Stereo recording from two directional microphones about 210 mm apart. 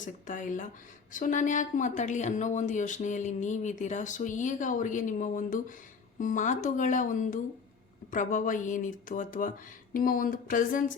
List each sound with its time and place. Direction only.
0.0 s speech: 35° left (ahead or behind)